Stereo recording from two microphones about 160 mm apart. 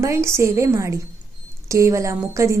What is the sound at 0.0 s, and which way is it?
A woman's voice, 15° right (ahead or behind).